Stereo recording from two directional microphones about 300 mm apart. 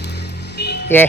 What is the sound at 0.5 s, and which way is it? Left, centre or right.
Vehicle, left.